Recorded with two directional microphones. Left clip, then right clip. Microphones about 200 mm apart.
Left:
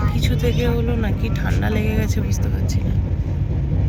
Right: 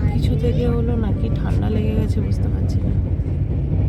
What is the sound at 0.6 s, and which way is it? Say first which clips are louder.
Speech: even; 25° left (ahead or behind).